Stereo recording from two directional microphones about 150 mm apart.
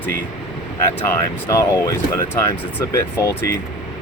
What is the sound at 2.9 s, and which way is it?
Speech, 20° left (ahead or behind).